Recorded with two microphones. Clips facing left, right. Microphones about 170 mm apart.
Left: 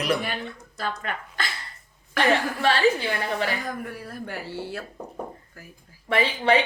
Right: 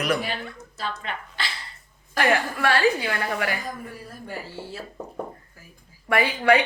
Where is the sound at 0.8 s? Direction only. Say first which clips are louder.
Left 1 dB; 50° left (ahead or behind).